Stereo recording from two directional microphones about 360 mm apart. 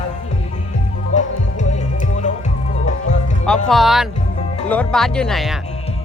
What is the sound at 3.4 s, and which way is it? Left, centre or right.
Speech, centre.